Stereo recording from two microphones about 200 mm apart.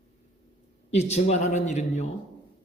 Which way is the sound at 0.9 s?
35° left (ahead or behind).